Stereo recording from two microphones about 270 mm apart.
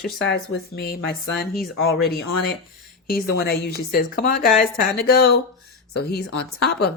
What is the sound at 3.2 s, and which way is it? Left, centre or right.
A woman's voice, left.